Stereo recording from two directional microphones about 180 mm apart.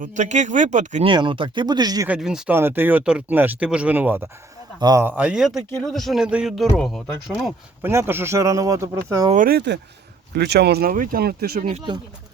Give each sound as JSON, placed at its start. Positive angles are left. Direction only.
{"t": 0.0, "sound": "speech", "side_deg": -45}
{"t": 1.0, "sound": "speech", "side_deg": -25}
{"t": 2.0, "sound": "speech", "side_deg": -5}
{"t": 4.8, "sound": "speech", "side_deg": -20}
{"t": 5.0, "sound": "speech", "side_deg": -10}
{"t": 7.8, "sound": "speech", "side_deg": -15}
{"t": 9.3, "sound": "speech", "side_deg": -55}